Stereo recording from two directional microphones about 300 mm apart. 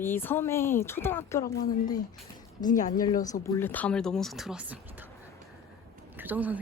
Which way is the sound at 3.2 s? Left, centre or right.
Centre.